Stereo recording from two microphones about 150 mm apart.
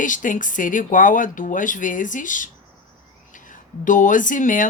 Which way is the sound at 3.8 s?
60° left (ahead or behind).